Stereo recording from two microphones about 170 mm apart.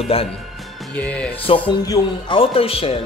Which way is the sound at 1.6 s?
25° left (ahead or behind).